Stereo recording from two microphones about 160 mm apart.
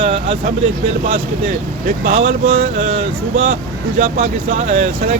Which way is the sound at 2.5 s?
40° right (ahead or behind).